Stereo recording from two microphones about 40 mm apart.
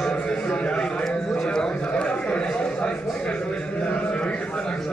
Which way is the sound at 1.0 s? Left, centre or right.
Centre.